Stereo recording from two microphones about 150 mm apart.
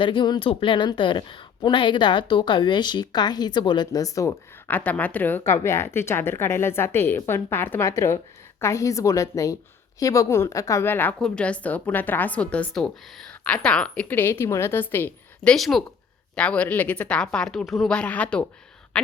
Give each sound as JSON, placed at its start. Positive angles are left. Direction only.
{"t": 0.0, "sound": "a woman's voice", "side_deg": 35}
{"t": 15.5, "sound": "a woman's voice", "side_deg": 0}